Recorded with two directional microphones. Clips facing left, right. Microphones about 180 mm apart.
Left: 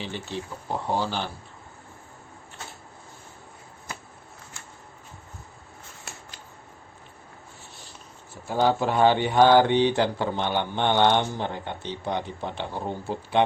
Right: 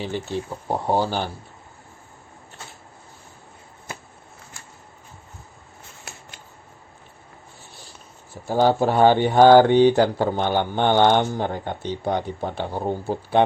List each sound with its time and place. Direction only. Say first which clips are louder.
0.0 s speech: right 6 dB; 45° right (ahead or behind)
8.4 s speech: right 4 dB; 35° right (ahead or behind)